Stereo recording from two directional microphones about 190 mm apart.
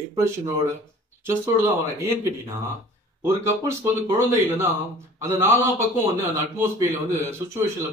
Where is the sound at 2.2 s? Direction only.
10° right (ahead or behind).